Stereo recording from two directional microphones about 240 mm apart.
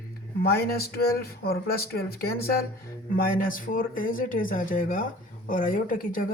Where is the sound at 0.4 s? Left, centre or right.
Left.